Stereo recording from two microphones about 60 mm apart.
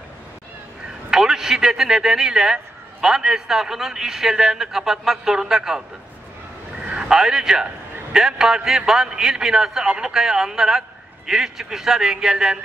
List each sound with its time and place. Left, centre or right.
1.1 s a man's voice: centre